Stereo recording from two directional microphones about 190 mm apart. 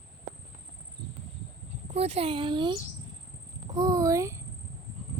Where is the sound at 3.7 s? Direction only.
20° right (ahead or behind).